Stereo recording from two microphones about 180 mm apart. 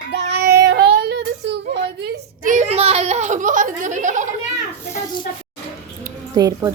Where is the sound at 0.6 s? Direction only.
70° right (ahead or behind).